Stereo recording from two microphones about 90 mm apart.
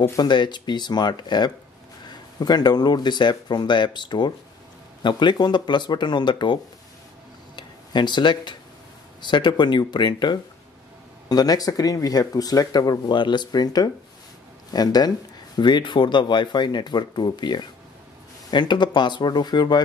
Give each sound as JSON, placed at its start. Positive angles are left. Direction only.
{"t": 0.1, "sound": "speech", "side_deg": 50}